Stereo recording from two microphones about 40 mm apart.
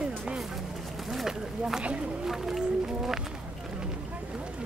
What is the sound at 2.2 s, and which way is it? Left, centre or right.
Speech, centre.